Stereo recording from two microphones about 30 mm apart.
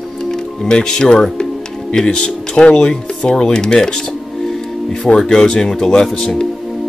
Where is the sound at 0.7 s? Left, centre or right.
Left.